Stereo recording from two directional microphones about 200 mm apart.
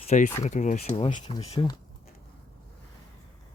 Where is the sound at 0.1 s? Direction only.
35° left (ahead or behind).